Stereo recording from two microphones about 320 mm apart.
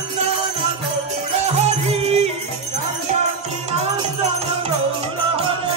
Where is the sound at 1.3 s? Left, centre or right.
Centre.